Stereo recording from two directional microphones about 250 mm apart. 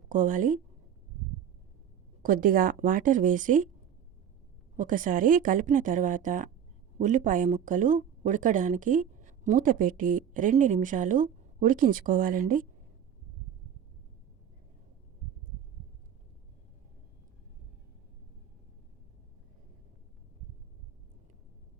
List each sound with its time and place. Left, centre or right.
0.1 s speech: right
2.2 s speech: right
4.8 s speech: right